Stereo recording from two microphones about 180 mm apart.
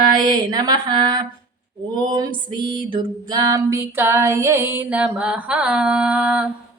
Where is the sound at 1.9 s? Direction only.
25° right (ahead or behind); by 6.4 s 5° right (ahead or behind).